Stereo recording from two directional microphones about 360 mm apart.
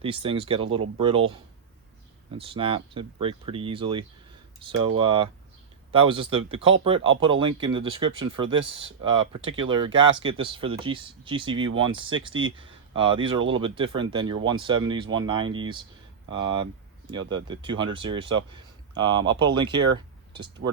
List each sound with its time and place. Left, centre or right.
0.0 s speech: centre
2.3 s speech: centre
12.3 s speech: right
12.5 s speech: centre
17.1 s speech: centre